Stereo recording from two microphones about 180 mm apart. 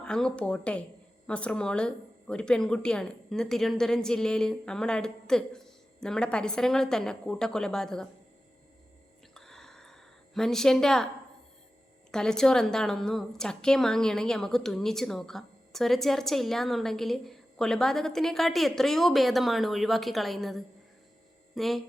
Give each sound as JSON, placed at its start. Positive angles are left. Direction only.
{"t": 0.0, "sound": "a woman's voice", "side_deg": 5}
{"t": 9.3, "sound": "a sound", "side_deg": 0}
{"t": 12.1, "sound": "a woman's voice", "side_deg": 5}